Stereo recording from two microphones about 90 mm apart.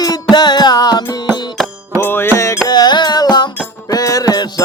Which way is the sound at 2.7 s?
55° left (ahead or behind).